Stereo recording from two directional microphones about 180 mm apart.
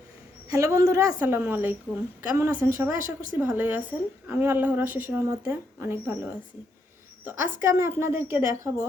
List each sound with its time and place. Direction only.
0.4 s a man's voice: 20° right (ahead or behind)